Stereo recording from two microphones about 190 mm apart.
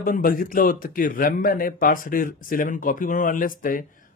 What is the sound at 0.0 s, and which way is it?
Speech, 45° left (ahead or behind).